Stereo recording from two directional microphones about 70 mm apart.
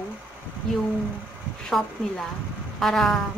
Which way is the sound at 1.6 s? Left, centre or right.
Centre.